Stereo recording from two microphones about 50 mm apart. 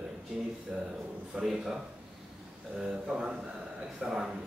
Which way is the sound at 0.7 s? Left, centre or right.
Centre.